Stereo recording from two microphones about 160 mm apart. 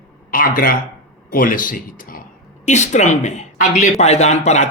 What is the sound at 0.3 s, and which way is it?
Speech, 60° left (ahead or behind).